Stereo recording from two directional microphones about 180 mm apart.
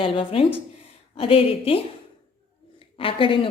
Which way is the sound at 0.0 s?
30° left (ahead or behind).